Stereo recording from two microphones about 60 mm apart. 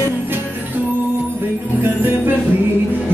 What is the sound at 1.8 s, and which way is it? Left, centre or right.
Music, right.